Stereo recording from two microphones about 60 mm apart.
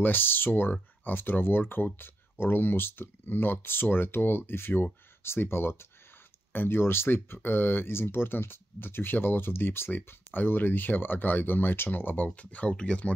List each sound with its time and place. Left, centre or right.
0.0 s speech: left